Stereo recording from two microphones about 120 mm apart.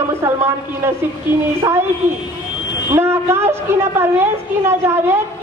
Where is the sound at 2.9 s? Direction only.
20° right (ahead or behind).